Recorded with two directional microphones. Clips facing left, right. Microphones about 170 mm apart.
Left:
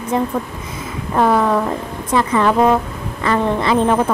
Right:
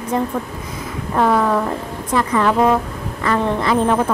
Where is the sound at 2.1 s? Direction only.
20° left (ahead or behind).